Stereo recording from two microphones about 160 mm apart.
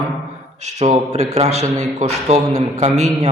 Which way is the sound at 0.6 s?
45° right (ahead or behind).